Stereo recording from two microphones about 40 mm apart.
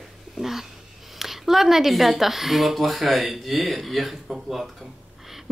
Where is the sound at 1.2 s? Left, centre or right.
Centre.